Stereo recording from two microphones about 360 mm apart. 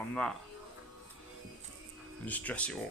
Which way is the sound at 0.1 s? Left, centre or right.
Centre.